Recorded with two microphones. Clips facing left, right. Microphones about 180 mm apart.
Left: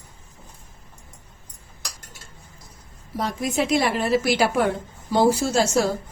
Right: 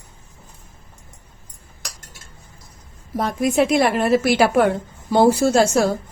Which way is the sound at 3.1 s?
50° right (ahead or behind).